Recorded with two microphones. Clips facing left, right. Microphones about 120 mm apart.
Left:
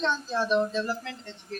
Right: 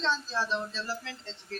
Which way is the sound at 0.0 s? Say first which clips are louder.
Left 3 dB; 15° left (ahead or behind).